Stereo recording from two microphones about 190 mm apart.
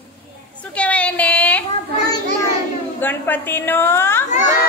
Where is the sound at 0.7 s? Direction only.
5° left (ahead or behind).